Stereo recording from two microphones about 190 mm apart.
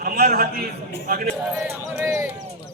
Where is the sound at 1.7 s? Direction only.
15° right (ahead or behind).